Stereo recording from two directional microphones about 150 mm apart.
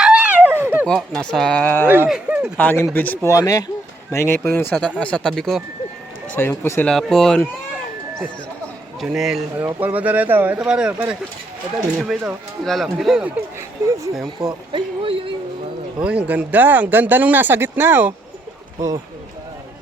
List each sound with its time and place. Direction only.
0.0 s a sound: 5° right (ahead or behind)
0.9 s speech: 5° left (ahead or behind)
2.0 s speech: 5° right (ahead or behind)
2.6 s speech: 15° left (ahead or behind)
3.3 s speech: 25° left (ahead or behind); by 5.6 s centre (ahead or behind)
6.3 s speech: 15° left (ahead or behind)
6.9 s speech: 5° left (ahead or behind)
9.0 s a man's voice: centre (ahead or behind)
14.7 s speech: 35° right (ahead or behind)
16.0 s speech: 10° right (ahead or behind)